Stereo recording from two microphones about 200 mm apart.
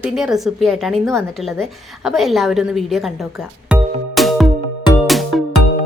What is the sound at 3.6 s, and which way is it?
Music, 5° right (ahead or behind).